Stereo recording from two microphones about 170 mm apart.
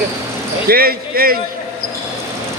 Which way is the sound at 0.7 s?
60° right (ahead or behind).